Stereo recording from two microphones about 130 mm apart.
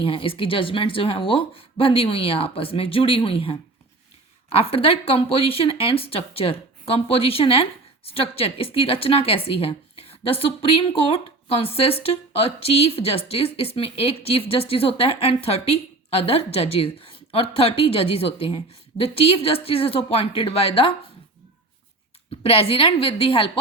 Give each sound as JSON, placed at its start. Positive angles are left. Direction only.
{"t": 0.0, "sound": "speech", "side_deg": 45}
{"t": 22.4, "sound": "speech", "side_deg": 45}